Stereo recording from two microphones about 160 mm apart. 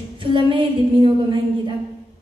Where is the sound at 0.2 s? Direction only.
30° right (ahead or behind).